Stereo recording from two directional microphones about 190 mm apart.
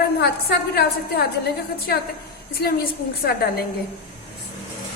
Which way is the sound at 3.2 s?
55° left (ahead or behind).